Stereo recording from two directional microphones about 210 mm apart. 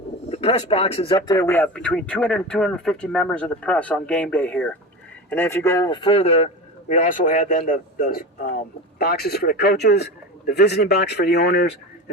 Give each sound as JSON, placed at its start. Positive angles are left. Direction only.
{"t": 0.3, "sound": "speech", "side_deg": 30}